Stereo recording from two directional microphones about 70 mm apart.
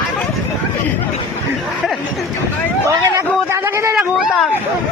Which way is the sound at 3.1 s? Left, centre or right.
Right.